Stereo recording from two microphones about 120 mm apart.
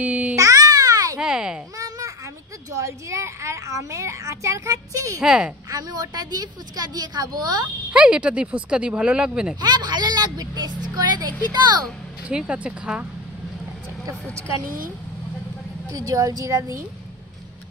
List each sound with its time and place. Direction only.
0.0 s babbling: 10° right (ahead or behind)
0.4 s babbling: 30° right (ahead or behind)
1.2 s a sound: 5° right (ahead or behind)
1.8 s a sound: 30° right (ahead or behind)
2.7 s a child's voice: 25° right (ahead or behind)
5.2 s a woman's voice: 5° right (ahead or behind)
5.7 s a woman's voice: 30° right (ahead or behind)
7.9 s speech: 10° right (ahead or behind)
9.6 s a woman's voice: 35° right (ahead or behind)
12.3 s speech: 10° right (ahead or behind)
15.9 s a child's voice: 30° right (ahead or behind)